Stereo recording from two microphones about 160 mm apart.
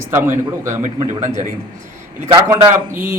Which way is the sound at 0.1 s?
15° right (ahead or behind).